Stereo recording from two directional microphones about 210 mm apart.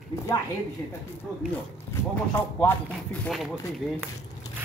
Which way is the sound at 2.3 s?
10° left (ahead or behind).